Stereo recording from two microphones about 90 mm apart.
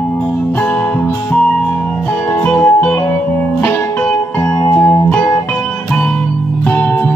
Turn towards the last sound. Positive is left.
turn(degrees=15)  # may be behind; listen again after turning